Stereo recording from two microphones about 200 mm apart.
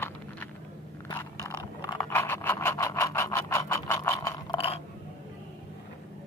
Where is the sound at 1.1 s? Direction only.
15° left (ahead or behind).